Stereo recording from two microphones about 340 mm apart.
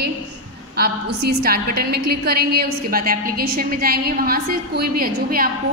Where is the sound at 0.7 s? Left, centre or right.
Right.